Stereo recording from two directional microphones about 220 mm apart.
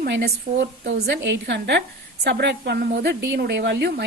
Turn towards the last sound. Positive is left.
turn(degrees=-50)  # may be behind; listen again after turning